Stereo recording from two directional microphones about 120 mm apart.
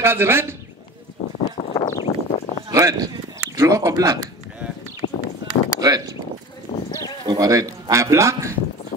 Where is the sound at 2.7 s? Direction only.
30° right (ahead or behind).